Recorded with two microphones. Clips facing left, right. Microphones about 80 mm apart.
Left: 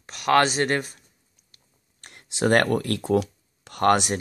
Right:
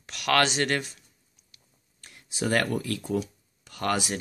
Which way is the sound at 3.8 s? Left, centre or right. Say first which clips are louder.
Left 8 dB; left.